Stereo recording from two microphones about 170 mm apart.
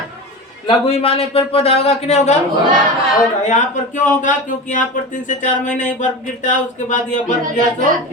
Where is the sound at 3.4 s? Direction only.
45° left (ahead or behind).